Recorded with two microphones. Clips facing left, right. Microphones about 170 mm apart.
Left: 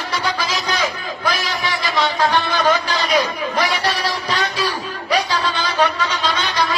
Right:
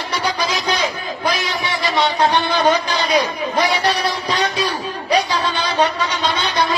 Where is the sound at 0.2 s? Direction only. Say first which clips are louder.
Right 4 dB; 20° right (ahead or behind).